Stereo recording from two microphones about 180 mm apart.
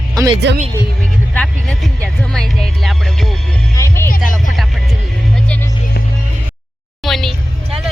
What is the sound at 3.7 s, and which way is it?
Music, 15° left (ahead or behind).